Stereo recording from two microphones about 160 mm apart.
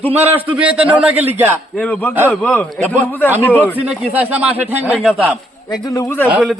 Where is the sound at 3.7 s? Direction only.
5° right (ahead or behind).